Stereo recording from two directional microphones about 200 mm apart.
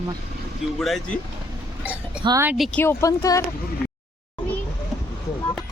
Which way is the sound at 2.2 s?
15° right (ahead or behind).